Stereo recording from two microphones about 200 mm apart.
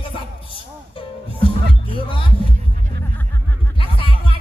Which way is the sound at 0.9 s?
25° left (ahead or behind).